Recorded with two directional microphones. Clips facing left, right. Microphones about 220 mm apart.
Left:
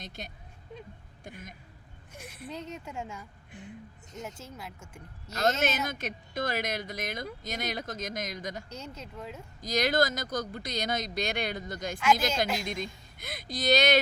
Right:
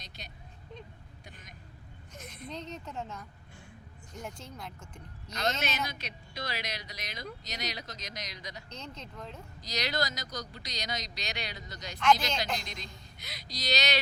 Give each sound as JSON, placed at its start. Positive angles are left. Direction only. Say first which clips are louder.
{"t": 0.2, "sound": "speech", "louder": "left 6 dB", "side_deg": 50}
{"t": 2.1, "sound": "speech", "louder": "left 2 dB", "side_deg": 10}
{"t": 5.4, "sound": "speech", "louder": "left 5 dB", "side_deg": 45}
{"t": 8.7, "sound": "speech", "louder": "left 3 dB", "side_deg": 10}
{"t": 9.6, "sound": "speech", "louder": "left 7 dB", "side_deg": 50}
{"t": 11.9, "sound": "speech", "louder": "even", "side_deg": 5}
{"t": 12.6, "sound": "speech", "louder": "left 10 dB", "side_deg": 50}